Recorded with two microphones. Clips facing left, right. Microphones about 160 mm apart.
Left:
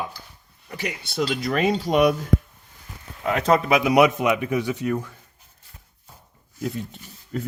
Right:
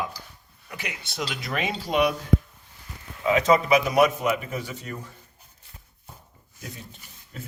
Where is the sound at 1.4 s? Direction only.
40° left (ahead or behind).